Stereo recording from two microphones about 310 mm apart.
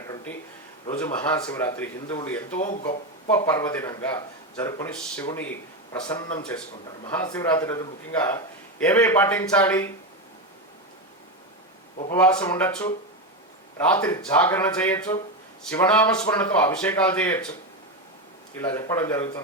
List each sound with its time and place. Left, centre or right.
0.9 s speech: centre
2.6 s speech: left
3.2 s speech: centre
12.1 s speech: centre
18.5 s speech: centre